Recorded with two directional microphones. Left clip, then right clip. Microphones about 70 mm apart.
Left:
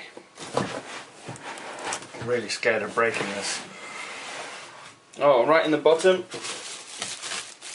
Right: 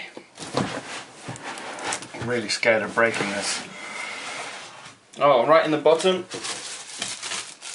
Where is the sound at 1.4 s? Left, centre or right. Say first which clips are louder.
Right 3 dB; centre.